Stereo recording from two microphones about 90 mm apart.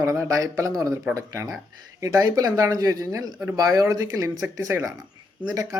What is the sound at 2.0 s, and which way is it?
Speech, 40° right (ahead or behind).